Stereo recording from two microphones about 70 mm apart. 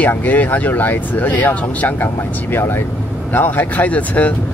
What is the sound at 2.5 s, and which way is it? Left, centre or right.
Speech, left.